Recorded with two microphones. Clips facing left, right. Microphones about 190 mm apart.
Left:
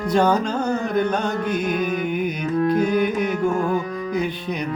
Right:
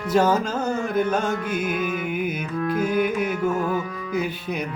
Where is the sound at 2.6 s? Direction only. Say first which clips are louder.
Left 5 dB; 35° left (ahead or behind).